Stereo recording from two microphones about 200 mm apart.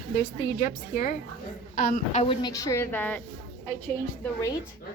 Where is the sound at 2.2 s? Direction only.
25° left (ahead or behind); by 3.2 s 10° left (ahead or behind).